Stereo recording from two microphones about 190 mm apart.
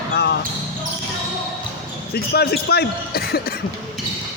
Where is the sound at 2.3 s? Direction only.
55° left (ahead or behind).